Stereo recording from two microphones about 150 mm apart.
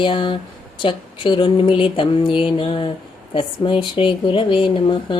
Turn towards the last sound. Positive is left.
turn(degrees=35)  # may be behind; listen again after turning